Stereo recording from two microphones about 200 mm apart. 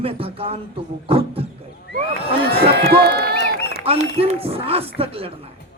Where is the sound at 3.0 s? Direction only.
50° right (ahead or behind).